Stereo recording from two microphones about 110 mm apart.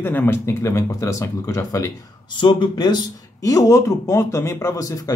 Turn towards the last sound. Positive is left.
turn(degrees=30)  # may be behind; listen again after turning